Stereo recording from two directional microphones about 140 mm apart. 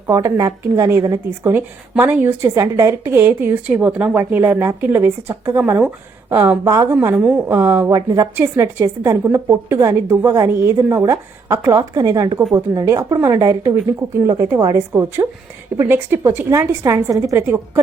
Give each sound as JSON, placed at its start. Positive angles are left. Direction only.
{"t": 0.1, "sound": "a woman's voice", "side_deg": -25}